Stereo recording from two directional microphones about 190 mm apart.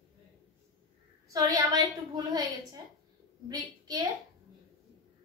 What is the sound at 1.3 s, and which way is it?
A woman's voice, 20° right (ahead or behind).